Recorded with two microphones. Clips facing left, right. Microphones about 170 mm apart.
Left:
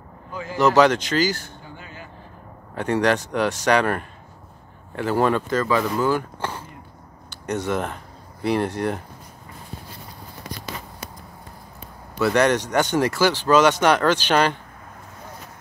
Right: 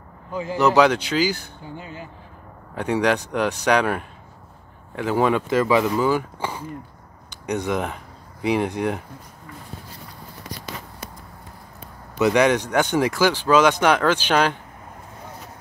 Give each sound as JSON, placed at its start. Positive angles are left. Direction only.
{"t": 0.3, "sound": "a man's voice", "side_deg": -25}
{"t": 0.6, "sound": "speech", "side_deg": -10}
{"t": 1.8, "sound": "a sound", "side_deg": -25}
{"t": 2.7, "sound": "speech", "side_deg": -10}
{"t": 12.2, "sound": "speech", "side_deg": -15}